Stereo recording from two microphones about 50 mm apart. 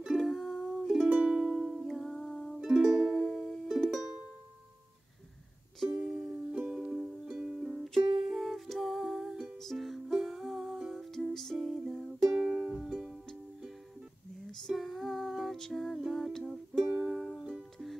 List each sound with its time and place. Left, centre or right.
0.0 s music: centre
1.0 s music: right
1.3 s music: centre
1.9 s music: centre
2.6 s music: centre
3.6 s music: centre
5.9 s music: centre
6.5 s music: centre
11.5 s music: centre
14.7 s music: centre
16.0 s humming: centre
16.4 s music: centre